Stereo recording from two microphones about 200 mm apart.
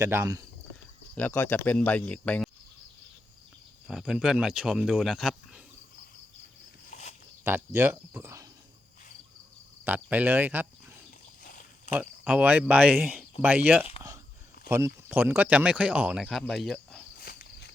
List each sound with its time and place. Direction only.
0.0 s cricket: 15° right (ahead or behind)
1.1 s speech: 10° left (ahead or behind)
3.8 s speech: centre (ahead or behind)
6.9 s a sound: 35° left (ahead or behind)
7.4 s cricket: 10° right (ahead or behind)
9.8 s cricket: 10° right (ahead or behind)
11.9 s cricket: 5° right (ahead or behind)
14.7 s speech: 10° right (ahead or behind)
17.2 s walk: 50° left (ahead or behind)